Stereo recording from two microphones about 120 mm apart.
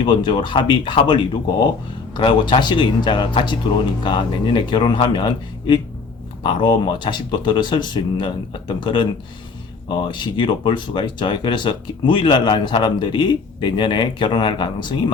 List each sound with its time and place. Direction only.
0.0 s speech: 40° left (ahead or behind)
10.1 s speech: 40° left (ahead or behind)